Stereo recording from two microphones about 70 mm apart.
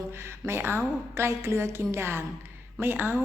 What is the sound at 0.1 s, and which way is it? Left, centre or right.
A woman's voice, right.